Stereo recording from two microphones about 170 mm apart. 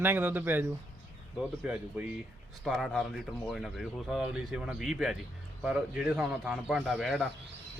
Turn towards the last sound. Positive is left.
turn(degrees=0)  # may be behind; listen again after turning